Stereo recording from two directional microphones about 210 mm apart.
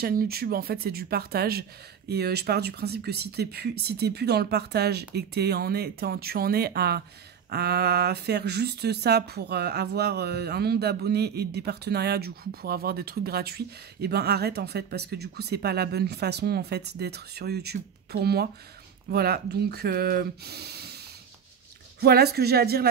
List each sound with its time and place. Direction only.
0.0 s speech: 45° right (ahead or behind)
22.0 s speech: 50° right (ahead or behind)